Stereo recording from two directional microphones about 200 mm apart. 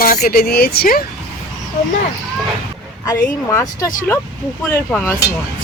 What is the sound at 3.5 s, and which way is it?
Speech, 15° left (ahead or behind).